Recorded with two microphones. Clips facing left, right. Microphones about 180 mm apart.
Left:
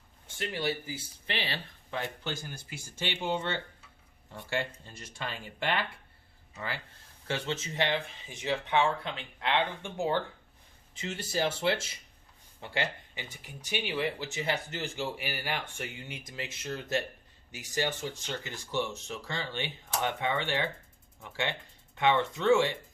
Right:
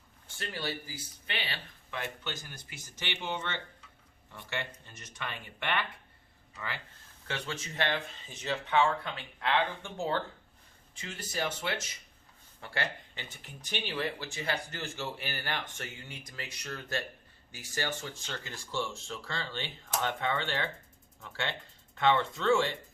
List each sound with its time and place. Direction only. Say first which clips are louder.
0.3 s speech: left 5 dB; 20° left (ahead or behind)
7.3 s speech: left 4 dB; 25° left (ahead or behind)
12.5 s speech: left 2 dB; 15° left (ahead or behind)